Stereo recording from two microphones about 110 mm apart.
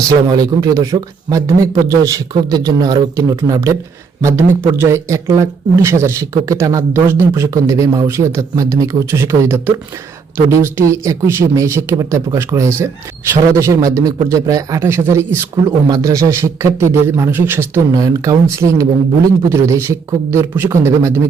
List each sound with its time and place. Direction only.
0.3 s speech: 35° right (ahead or behind)
14.8 s speech: 20° right (ahead or behind)
17.9 s speech: 30° right (ahead or behind)